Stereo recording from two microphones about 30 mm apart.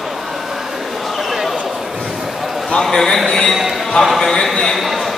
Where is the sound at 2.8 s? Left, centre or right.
Centre.